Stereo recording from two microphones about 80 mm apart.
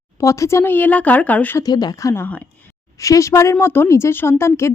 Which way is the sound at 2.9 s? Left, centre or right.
Left.